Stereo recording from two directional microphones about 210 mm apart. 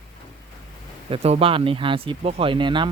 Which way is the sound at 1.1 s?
30° right (ahead or behind).